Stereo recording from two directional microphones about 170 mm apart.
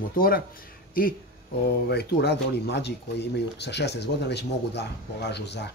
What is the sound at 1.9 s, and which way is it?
Speech, 75° left (ahead or behind).